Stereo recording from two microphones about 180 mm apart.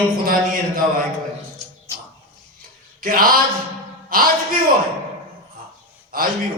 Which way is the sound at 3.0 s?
50° right (ahead or behind).